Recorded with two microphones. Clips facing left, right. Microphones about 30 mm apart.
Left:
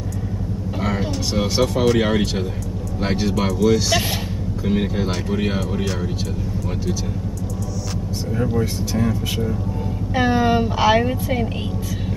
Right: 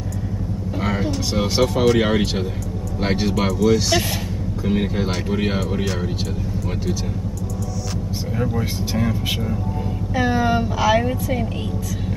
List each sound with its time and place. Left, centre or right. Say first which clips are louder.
0.7 s speech: right 1 dB; centre
8.4 s speech: left 2 dB; centre
10.1 s speech: left 2 dB; centre